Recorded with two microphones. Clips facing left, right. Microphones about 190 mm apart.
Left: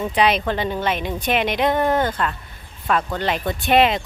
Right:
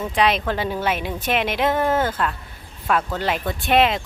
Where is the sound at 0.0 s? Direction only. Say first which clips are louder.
Left 1 dB; centre (ahead or behind).